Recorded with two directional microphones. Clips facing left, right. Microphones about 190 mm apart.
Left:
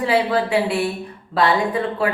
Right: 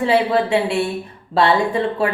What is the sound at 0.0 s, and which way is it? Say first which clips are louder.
A woman's voice: right 2 dB; 25° right (ahead or behind).